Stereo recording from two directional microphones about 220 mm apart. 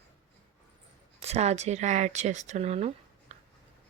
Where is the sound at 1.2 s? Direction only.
30° right (ahead or behind).